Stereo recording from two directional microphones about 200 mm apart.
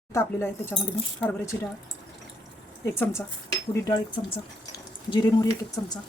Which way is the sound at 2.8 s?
10° left (ahead or behind).